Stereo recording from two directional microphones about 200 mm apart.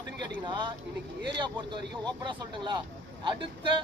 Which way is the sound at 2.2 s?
20° right (ahead or behind).